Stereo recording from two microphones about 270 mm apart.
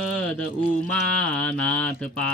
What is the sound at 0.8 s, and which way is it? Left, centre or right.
Speech, centre.